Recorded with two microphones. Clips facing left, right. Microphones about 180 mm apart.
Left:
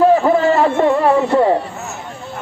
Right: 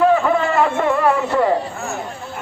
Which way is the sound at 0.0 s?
35° left (ahead or behind).